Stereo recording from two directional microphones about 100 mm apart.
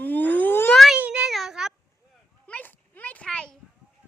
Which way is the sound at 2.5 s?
15° left (ahead or behind).